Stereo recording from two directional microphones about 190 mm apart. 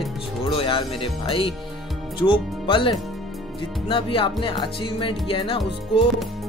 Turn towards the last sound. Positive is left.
turn(degrees=30)  # may be behind; listen again after turning